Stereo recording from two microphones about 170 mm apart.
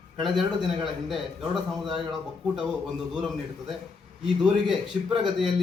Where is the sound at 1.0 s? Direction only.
Centre (ahead or behind).